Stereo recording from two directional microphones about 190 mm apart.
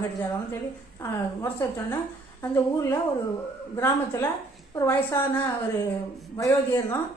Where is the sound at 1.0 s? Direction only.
10° left (ahead or behind).